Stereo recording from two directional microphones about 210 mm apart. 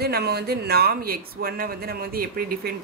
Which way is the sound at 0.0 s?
50° right (ahead or behind).